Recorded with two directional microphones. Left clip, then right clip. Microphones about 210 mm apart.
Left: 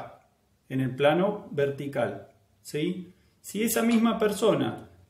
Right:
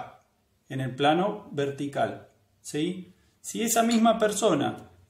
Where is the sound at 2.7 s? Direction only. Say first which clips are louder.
Even; 30° right (ahead or behind).